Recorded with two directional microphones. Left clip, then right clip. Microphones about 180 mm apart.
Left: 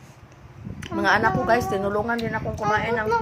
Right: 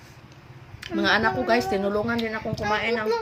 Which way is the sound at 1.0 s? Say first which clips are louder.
Left 2 dB; 15° right (ahead or behind).